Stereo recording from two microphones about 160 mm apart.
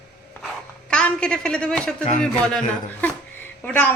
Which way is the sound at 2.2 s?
5° left (ahead or behind).